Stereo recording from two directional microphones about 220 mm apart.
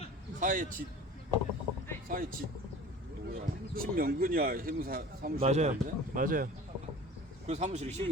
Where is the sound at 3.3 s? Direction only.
40° right (ahead or behind).